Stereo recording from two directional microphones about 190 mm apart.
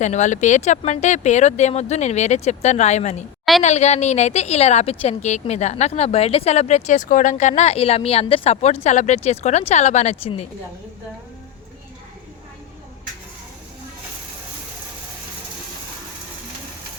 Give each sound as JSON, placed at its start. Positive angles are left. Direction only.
{"t": 0.0, "sound": "a woman's voice", "side_deg": 40}